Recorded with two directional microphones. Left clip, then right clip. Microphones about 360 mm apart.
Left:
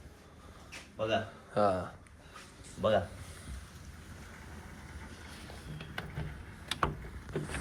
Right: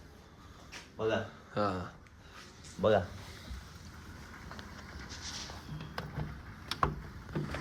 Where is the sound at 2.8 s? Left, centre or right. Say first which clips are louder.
Right 1 dB; centre.